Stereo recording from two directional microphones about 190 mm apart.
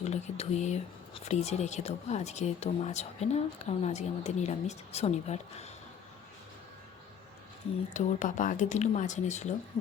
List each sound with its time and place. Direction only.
0.0 s speech: 35° left (ahead or behind)
7.9 s speech: 40° left (ahead or behind)